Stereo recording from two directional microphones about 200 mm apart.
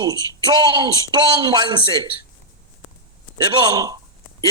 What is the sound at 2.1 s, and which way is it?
Speech, 50° left (ahead or behind).